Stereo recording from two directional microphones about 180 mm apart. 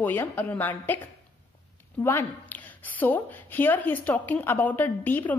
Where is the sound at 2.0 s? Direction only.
10° left (ahead or behind).